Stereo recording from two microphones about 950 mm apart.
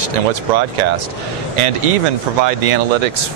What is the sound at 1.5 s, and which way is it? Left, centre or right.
Speech, right.